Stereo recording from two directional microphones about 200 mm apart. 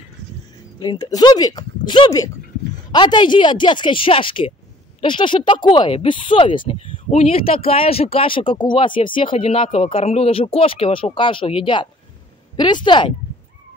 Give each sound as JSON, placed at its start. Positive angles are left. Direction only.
{"t": 0.7, "sound": "speech", "side_deg": 20}